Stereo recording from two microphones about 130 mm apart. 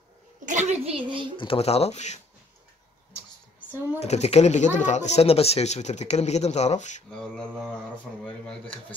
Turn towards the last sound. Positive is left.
turn(degrees=10)  # may be behind; listen again after turning